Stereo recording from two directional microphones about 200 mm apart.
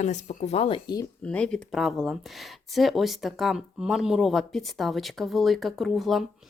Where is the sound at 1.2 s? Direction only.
5° left (ahead or behind).